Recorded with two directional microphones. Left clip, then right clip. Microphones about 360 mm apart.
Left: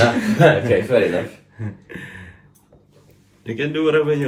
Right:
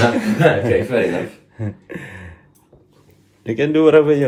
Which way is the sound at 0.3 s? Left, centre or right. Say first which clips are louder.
Left 2 dB; centre.